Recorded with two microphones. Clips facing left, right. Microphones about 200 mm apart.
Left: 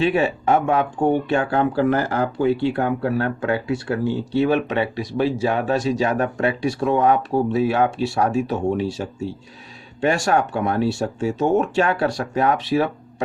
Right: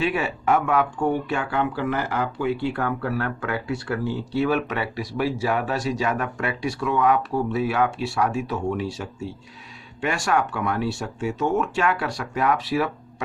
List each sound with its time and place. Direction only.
0.0 s speech: 30° left (ahead or behind)